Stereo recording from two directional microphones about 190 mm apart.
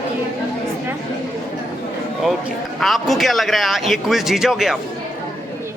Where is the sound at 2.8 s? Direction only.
Centre (ahead or behind).